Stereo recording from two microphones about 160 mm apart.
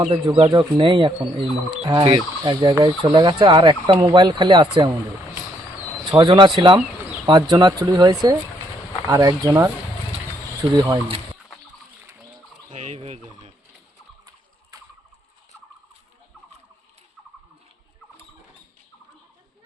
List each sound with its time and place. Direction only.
0.3 s speech: 25° right (ahead or behind)
6.1 s speech: 30° right (ahead or behind)
12.7 s fowl: 45° right (ahead or behind)